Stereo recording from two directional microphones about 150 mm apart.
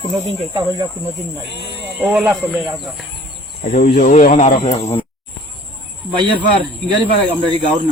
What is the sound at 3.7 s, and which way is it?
Speech, 65° left (ahead or behind).